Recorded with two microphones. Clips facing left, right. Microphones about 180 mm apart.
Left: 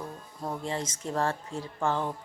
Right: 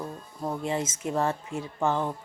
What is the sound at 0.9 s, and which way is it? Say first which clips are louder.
Speech: right 2 dB; 5° right (ahead or behind).